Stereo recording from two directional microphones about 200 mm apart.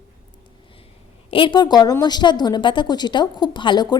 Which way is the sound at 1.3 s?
25° left (ahead or behind).